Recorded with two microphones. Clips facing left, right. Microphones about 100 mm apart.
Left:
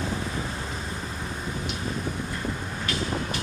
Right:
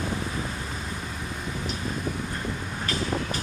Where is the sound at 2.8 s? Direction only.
35° right (ahead or behind).